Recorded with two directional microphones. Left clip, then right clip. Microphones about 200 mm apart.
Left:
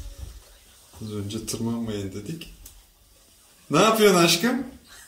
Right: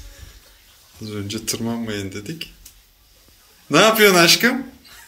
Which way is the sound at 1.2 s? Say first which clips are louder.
Right 6 dB; 5° right (ahead or behind).